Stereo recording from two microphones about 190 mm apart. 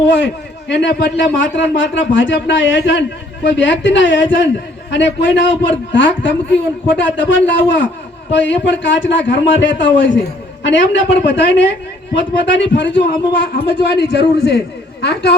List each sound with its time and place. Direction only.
0.7 s a man's voice: 65° left (ahead or behind)